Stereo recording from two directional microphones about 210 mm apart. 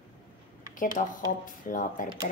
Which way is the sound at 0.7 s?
40° left (ahead or behind).